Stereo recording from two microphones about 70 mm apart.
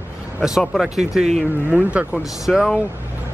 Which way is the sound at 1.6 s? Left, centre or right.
Right.